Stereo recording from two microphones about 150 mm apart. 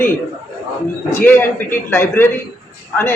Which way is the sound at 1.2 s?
10° left (ahead or behind).